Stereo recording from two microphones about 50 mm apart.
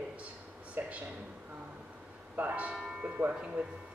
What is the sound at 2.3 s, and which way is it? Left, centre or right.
A man's voice, right.